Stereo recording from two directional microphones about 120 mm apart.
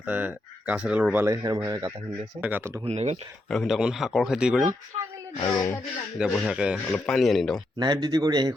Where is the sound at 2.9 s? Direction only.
65° right (ahead or behind).